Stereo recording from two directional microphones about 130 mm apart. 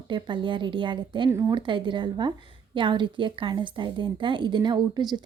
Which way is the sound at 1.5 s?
40° right (ahead or behind).